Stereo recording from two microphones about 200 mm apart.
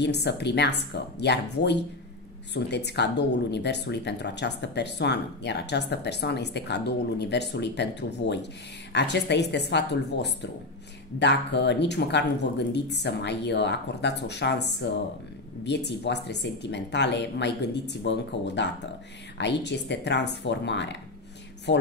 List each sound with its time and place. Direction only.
0.0 s speech: 55° left (ahead or behind)